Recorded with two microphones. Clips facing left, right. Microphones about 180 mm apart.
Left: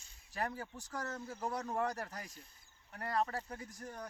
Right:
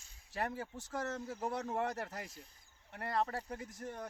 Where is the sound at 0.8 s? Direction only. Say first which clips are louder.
Right 4 dB; 25° right (ahead or behind).